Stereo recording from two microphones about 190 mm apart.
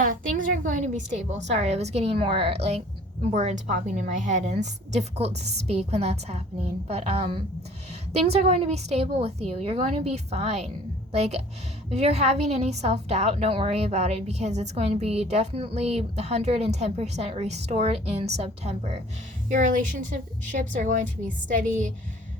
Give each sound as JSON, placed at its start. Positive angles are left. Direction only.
{"t": 0.0, "sound": "a woman's voice", "side_deg": -45}